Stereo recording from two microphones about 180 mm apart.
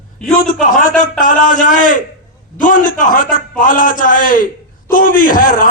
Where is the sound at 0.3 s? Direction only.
45° left (ahead or behind).